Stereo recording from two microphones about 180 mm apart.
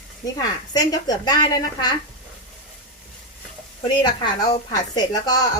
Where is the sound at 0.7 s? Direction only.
20° left (ahead or behind).